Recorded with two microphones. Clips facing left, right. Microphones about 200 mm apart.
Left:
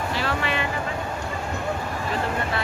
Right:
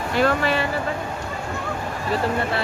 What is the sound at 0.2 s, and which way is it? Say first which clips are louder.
Speech: right 9 dB; 45° right (ahead or behind).